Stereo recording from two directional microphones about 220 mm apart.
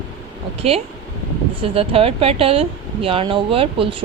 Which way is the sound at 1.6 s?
25° right (ahead or behind).